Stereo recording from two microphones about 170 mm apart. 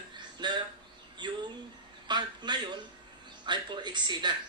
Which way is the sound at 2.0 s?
25° right (ahead or behind).